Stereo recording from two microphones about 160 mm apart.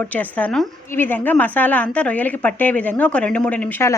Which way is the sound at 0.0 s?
10° left (ahead or behind).